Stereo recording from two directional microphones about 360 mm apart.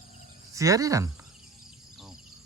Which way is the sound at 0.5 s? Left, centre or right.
Centre.